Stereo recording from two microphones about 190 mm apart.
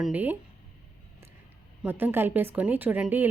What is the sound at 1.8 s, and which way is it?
A woman's voice, 10° right (ahead or behind).